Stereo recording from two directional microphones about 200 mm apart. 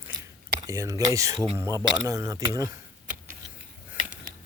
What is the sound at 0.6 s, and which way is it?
Speech, 15° right (ahead or behind).